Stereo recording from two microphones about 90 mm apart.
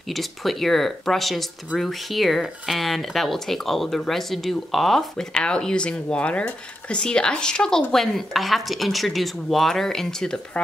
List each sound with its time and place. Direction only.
0.1 s speech: centre (ahead or behind)